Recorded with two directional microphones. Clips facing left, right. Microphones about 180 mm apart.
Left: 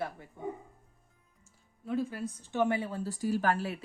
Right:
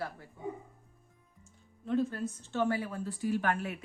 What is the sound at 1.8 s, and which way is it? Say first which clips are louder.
Speech: right 2 dB; 10° left (ahead or behind).